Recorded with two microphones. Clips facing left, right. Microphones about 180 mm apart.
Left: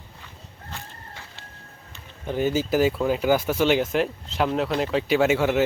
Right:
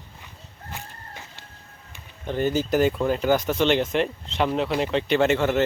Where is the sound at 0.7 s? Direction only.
15° right (ahead or behind).